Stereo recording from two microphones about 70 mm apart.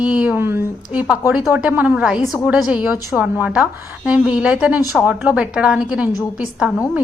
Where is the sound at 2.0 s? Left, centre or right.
Centre.